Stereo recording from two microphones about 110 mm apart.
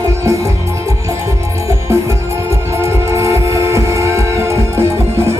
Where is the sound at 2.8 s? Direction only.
25° right (ahead or behind).